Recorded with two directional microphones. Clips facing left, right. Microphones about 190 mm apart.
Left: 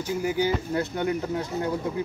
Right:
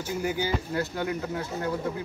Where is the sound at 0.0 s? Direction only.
20° left (ahead or behind).